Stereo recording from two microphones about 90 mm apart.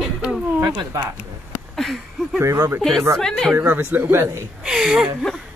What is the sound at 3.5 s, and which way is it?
Speech, 20° right (ahead or behind).